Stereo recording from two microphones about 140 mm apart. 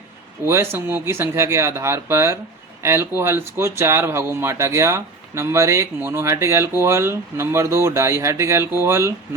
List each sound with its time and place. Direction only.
0.4 s speech: 20° right (ahead or behind)